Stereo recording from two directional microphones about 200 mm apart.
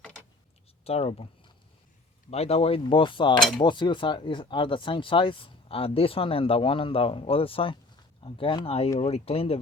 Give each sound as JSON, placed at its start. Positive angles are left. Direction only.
{"t": 0.9, "sound": "speech", "side_deg": 30}
{"t": 2.3, "sound": "speech", "side_deg": 30}